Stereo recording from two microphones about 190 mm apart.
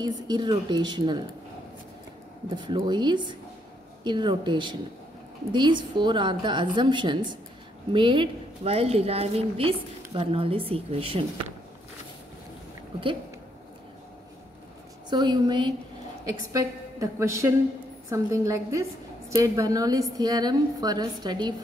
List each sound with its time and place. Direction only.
0.0 s a woman's voice: 20° right (ahead or behind)
2.5 s a woman's voice: 25° right (ahead or behind)
15.0 s a woman's voice: 25° right (ahead or behind)